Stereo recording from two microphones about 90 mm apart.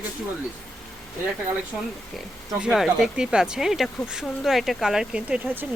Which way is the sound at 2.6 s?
5° right (ahead or behind).